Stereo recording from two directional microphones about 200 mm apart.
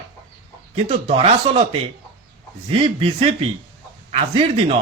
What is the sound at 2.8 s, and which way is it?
Speech, 30° right (ahead or behind).